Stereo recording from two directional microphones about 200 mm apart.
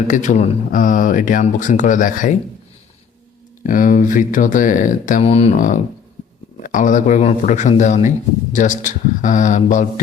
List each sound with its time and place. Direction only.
0.1 s speech: 40° left (ahead or behind)
3.6 s speech: 40° left (ahead or behind)